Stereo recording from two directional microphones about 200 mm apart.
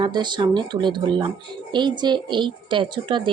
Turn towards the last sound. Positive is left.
turn(degrees=-25)  # may be behind; listen again after turning